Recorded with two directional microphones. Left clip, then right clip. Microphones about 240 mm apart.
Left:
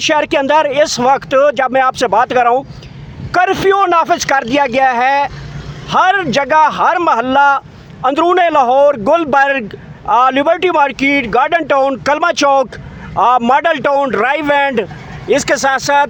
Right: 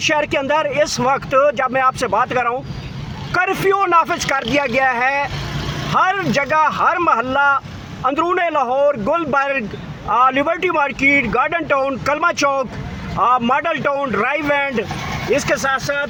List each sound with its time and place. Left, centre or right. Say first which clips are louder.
0.1 s a man's voice: left 7 dB; left
4.5 s a man's voice: left 4 dB; left
9.3 s a man's voice: left 6 dB; left